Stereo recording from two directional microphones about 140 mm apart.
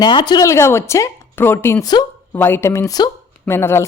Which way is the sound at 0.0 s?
35° left (ahead or behind).